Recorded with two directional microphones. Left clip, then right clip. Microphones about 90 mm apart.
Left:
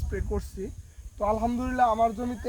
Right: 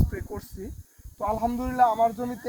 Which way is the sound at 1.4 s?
35° left (ahead or behind).